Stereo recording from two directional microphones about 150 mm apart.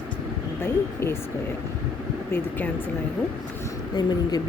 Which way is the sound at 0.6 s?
15° left (ahead or behind).